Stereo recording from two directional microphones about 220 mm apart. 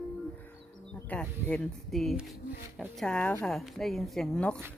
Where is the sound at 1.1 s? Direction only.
5° left (ahead or behind).